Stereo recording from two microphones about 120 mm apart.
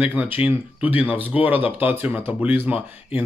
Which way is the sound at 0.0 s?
10° right (ahead or behind).